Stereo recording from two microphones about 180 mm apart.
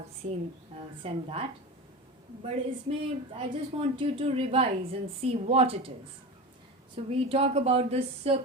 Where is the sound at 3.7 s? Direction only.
30° right (ahead or behind).